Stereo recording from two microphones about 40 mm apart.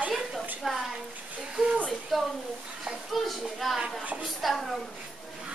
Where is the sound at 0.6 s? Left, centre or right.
Centre.